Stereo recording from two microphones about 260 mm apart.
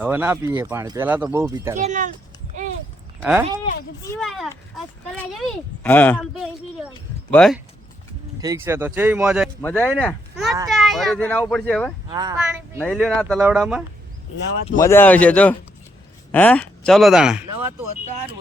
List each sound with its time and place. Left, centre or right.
0.0 s speech: centre
1.7 s speech: right
3.2 s speech: centre
8.4 s speech: centre
12.0 s speech: centre
12.8 s speech: centre
14.8 s speech: centre